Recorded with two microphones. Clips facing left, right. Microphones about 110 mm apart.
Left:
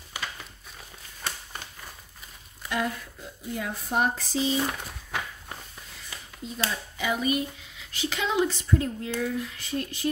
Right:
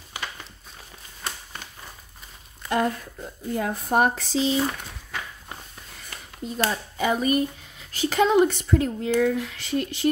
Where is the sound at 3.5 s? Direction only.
50° right (ahead or behind); by 4.4 s 75° right (ahead or behind).